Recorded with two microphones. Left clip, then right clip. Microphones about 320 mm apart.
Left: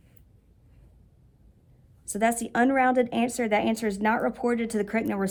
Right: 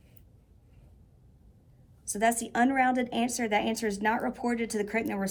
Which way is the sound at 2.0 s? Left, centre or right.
Left.